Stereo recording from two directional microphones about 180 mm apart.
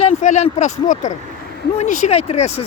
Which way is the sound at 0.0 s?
40° left (ahead or behind).